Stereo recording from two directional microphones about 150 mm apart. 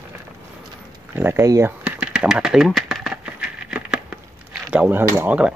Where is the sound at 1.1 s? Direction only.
15° right (ahead or behind).